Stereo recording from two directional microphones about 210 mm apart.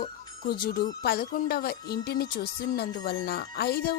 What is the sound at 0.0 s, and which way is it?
Speech, 45° left (ahead or behind).